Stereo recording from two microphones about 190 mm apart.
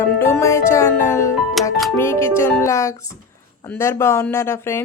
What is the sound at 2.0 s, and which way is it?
A woman's voice, 15° left (ahead or behind).